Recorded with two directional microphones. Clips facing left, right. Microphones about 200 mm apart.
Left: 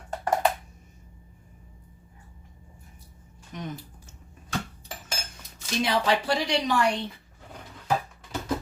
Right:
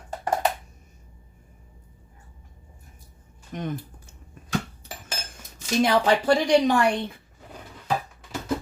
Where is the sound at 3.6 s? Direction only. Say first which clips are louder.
Right 5 dB; 55° right (ahead or behind).